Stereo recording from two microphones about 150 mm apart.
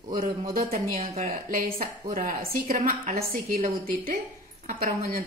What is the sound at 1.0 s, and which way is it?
Speech, 45° right (ahead or behind).